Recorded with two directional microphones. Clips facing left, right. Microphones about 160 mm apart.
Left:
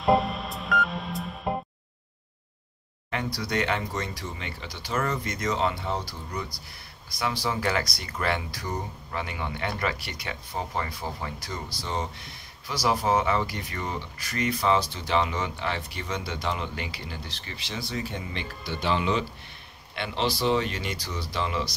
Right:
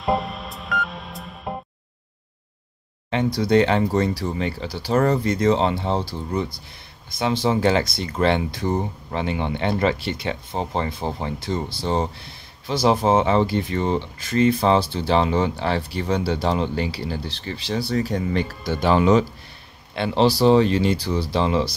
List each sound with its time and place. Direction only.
0.0 s music: centre (ahead or behind)
3.1 s speech: 25° right (ahead or behind)